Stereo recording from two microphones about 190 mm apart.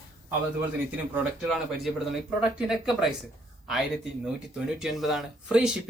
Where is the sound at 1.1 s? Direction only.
Centre (ahead or behind).